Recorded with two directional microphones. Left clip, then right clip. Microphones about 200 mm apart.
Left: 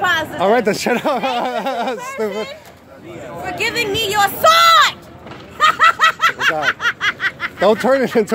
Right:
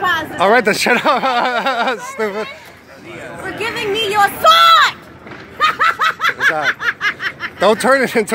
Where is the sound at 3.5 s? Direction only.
30° left (ahead or behind).